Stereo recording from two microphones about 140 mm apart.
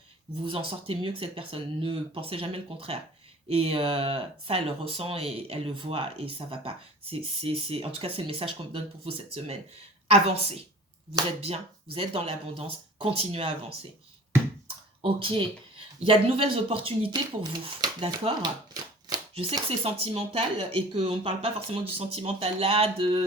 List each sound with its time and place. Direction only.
0.4 s speech: 40° right (ahead or behind)
15.0 s speech: 40° right (ahead or behind)
19.3 s speech: 45° right (ahead or behind)